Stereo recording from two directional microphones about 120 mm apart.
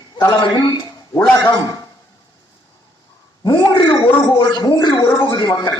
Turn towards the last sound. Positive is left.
turn(degrees=40)  # may be behind; listen again after turning